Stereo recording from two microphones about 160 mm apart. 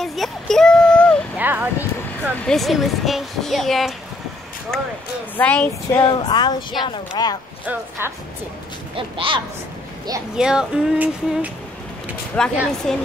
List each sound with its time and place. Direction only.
0.0 s a sound: centre (ahead or behind)
1.3 s a sound: 10° right (ahead or behind)
2.4 s speech: centre (ahead or behind)
6.0 s speech: 25° left (ahead or behind)
8.0 s speech: 15° right (ahead or behind)
8.9 s speech: 35° right (ahead or behind)
10.3 s speech: 5° right (ahead or behind)
12.4 s speech: 5° left (ahead or behind)